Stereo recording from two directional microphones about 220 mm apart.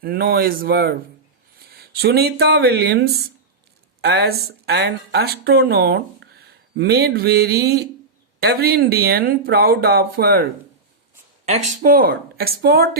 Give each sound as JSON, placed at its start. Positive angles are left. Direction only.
{"t": 0.0, "sound": "speech", "side_deg": -45}
{"t": 11.4, "sound": "speech", "side_deg": -30}